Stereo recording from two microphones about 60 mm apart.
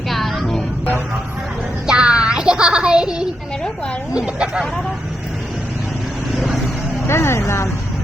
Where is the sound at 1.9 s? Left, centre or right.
Centre.